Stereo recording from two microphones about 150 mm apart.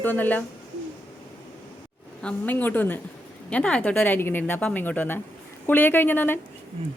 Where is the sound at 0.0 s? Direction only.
10° left (ahead or behind).